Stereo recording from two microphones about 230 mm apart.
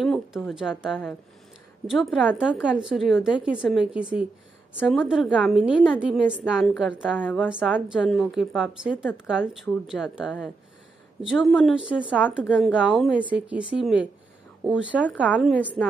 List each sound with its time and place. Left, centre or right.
0.0 s a woman's voice: centre